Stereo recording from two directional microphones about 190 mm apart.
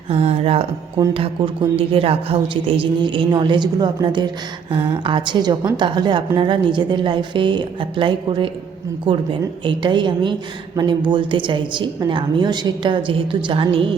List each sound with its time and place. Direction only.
0.1 s a woman's voice: 35° right (ahead or behind)
9.6 s a woman's voice: 25° right (ahead or behind)